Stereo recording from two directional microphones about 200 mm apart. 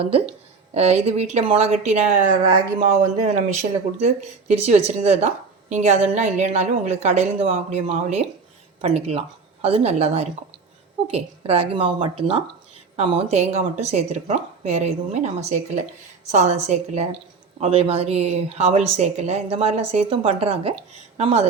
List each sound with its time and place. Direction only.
0.7 s speech: 30° right (ahead or behind)